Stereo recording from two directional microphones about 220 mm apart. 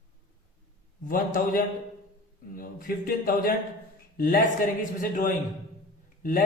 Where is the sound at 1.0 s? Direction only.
40° left (ahead or behind).